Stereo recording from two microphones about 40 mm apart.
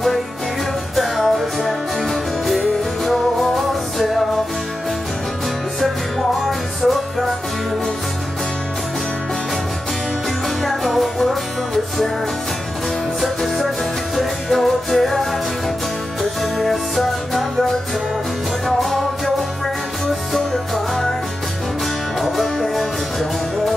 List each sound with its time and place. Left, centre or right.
0.9 s music: centre
5.8 s music: centre
10.6 s music: centre
13.2 s music: centre
18.7 s music: centre
20.3 s music: centre
22.2 s music: centre